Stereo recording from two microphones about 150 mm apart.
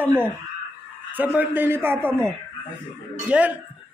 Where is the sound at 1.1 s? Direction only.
10° right (ahead or behind).